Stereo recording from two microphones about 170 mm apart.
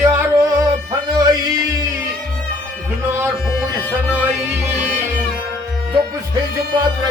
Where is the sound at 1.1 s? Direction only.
25° right (ahead or behind).